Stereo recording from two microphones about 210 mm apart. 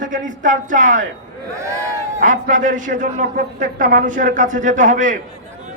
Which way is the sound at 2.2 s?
40° right (ahead or behind).